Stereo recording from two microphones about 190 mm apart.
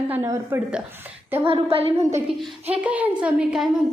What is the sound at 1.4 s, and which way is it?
Speech, 30° right (ahead or behind).